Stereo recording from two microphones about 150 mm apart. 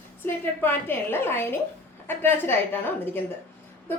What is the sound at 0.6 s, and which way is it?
A woman's voice, 15° left (ahead or behind).